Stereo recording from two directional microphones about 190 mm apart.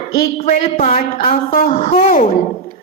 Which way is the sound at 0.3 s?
35° left (ahead or behind).